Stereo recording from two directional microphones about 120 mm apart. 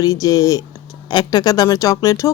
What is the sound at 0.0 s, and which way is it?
Speech, 30° left (ahead or behind).